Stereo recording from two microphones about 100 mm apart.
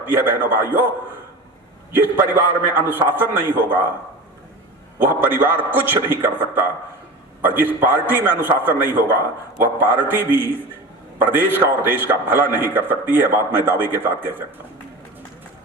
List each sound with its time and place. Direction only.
0.0 s a man's voice: 20° right (ahead or behind)
1.9 s a man's voice: 20° right (ahead or behind)
4.9 s a man's voice: 20° right (ahead or behind)